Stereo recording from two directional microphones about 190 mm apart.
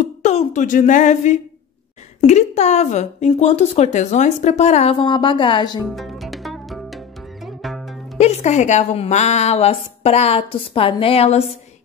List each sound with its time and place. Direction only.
0.2 s a woman's voice: 35° left (ahead or behind)
5.9 s music: centre (ahead or behind)
8.2 s a woman's voice: 35° left (ahead or behind)